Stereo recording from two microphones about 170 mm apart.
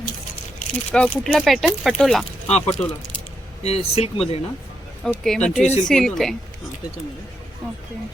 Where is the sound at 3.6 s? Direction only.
35° left (ahead or behind).